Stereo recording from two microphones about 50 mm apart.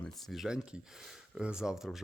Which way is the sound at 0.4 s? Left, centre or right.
Centre.